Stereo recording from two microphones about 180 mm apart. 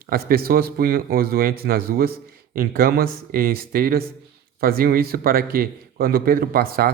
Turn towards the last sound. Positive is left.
turn(degrees=-55)  # may be behind; listen again after turning